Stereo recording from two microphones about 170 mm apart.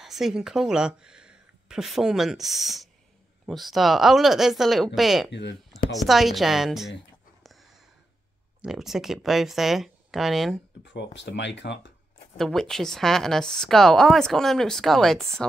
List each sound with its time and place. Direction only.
0.0 s a woman's voice: centre (ahead or behind)
5.3 s speech: 90° left
5.9 s a woman's voice: centre (ahead or behind)
7.4 s a sound: centre (ahead or behind)
8.5 s a woman's voice: 5° right (ahead or behind)
10.8 s speech: 90° left
12.4 s a woman's voice: centre (ahead or behind)